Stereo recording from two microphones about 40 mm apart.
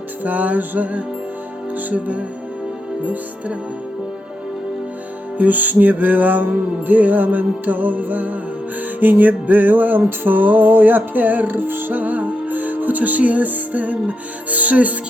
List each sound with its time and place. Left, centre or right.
0.2 s music: right
5.4 s music: right